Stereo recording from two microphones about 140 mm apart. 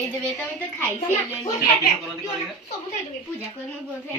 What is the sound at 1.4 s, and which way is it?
Speech, 20° left (ahead or behind).